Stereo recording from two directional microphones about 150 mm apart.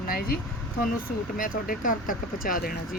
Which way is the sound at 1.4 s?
65° left (ahead or behind).